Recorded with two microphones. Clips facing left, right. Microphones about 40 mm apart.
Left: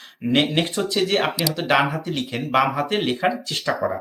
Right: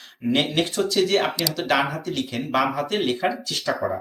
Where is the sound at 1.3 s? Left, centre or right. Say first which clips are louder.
Left 2 dB; centre.